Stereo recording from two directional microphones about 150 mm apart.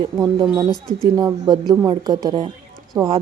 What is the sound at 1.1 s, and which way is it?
Speech, 25° right (ahead or behind).